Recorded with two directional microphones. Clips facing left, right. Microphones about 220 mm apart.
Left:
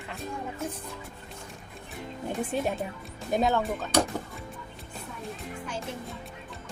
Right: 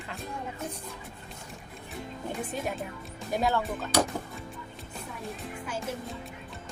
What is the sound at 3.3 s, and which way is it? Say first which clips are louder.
Speech: left 3 dB; 20° left (ahead or behind).